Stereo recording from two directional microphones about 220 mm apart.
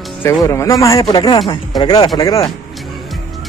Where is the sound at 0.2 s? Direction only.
10° left (ahead or behind).